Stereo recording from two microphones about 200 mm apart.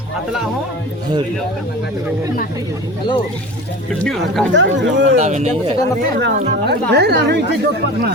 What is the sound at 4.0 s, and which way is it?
Speech, centre (ahead or behind).